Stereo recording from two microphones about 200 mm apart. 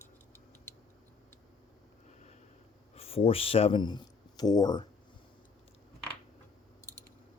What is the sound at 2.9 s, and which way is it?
Speech, 30° left (ahead or behind).